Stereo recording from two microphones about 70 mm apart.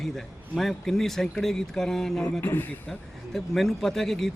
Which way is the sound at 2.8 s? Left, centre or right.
Centre.